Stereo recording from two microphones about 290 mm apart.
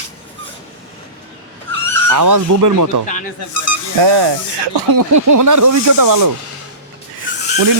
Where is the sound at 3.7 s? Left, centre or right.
Left.